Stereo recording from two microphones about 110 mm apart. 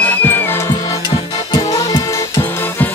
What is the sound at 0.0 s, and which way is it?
Music, 15° left (ahead or behind).